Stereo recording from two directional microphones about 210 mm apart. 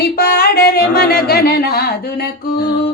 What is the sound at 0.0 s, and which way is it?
Music, 50° left (ahead or behind).